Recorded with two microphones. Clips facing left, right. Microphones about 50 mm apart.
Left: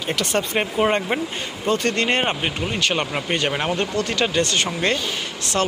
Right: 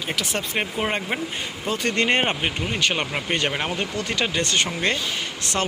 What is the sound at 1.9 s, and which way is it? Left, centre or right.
Speech, centre.